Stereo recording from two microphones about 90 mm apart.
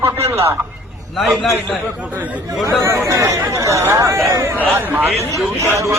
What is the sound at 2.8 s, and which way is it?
A man's voice, 30° right (ahead or behind).